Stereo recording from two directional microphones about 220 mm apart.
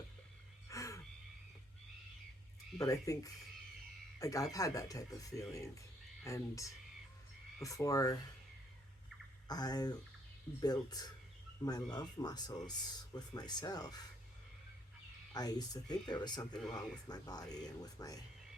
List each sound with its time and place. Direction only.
0.7 s wild animals: 15° left (ahead or behind)
2.7 s speech: 15° left (ahead or behind)
4.2 s speech: 15° left (ahead or behind)
9.5 s speech: 20° left (ahead or behind)
15.3 s speech: 15° left (ahead or behind)